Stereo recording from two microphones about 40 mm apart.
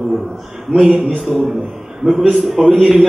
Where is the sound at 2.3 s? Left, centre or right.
Centre.